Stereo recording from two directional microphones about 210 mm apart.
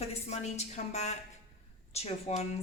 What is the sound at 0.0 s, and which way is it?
A woman's voice, 30° left (ahead or behind).